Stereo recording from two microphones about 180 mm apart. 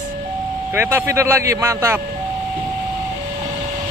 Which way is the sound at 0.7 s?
10° right (ahead or behind).